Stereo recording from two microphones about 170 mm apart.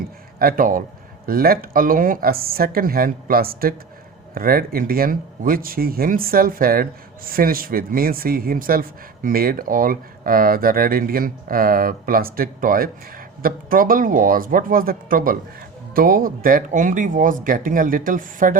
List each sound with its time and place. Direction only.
0.3 s speech: 55° right (ahead or behind)